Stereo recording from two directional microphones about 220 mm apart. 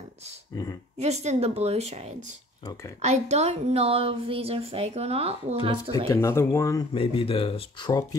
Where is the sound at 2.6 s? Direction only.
15° left (ahead or behind).